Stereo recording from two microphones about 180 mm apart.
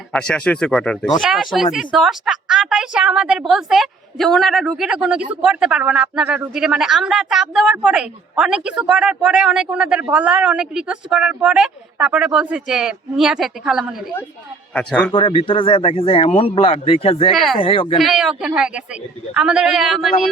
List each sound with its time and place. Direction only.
0.1 s a woman's voice: 5° left (ahead or behind)
15.1 s a man's voice: 30° left (ahead or behind)
17.3 s a woman's voice: centre (ahead or behind)
17.6 s speech: 30° left (ahead or behind)
17.9 s a woman's voice: centre (ahead or behind)